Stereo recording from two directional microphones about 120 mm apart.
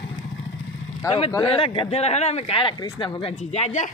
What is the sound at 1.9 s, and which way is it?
Speech, 65° left (ahead or behind).